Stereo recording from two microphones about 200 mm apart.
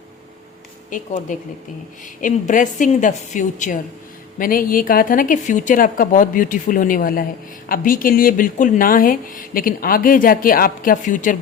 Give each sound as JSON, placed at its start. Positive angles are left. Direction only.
{"t": 0.9, "sound": "a woman's voice", "side_deg": 40}